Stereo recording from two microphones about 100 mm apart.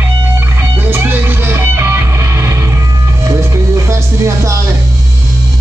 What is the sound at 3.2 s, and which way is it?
Vehicle, 30° right (ahead or behind).